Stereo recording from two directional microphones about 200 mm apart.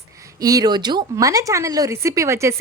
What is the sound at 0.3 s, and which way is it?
A woman's voice, 20° right (ahead or behind).